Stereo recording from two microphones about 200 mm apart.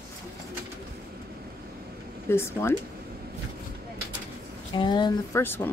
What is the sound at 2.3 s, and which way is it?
Speech, 10° left (ahead or behind).